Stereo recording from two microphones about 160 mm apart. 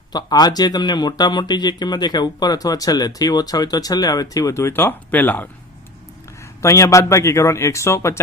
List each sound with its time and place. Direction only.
0.1 s speech: 25° left (ahead or behind)
6.6 s speech: 20° left (ahead or behind)